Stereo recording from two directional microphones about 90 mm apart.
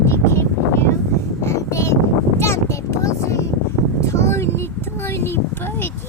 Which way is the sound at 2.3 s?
30° left (ahead or behind).